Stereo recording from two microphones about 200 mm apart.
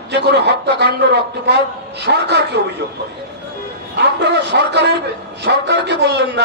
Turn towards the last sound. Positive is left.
turn(degrees=-60)  # may be behind; listen again after turning